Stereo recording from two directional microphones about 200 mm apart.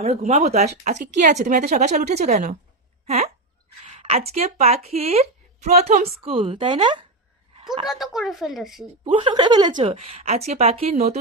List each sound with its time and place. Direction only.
0.0 s speech: 35° right (ahead or behind)
3.8 s a woman's voice: 35° right (ahead or behind)
7.9 s a woman's voice: centre (ahead or behind)
9.0 s a woman's voice: 25° right (ahead or behind)